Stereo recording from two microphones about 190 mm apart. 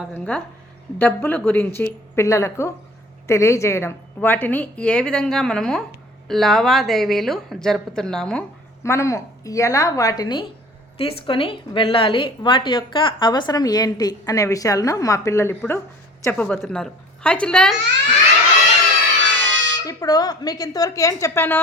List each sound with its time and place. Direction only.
0.1 s a woman's voice: 5° left (ahead or behind)
8.8 s a woman's voice: 15° left (ahead or behind)
19.2 s music: 70° right (ahead or behind)
19.8 s a woman's voice: 20° left (ahead or behind)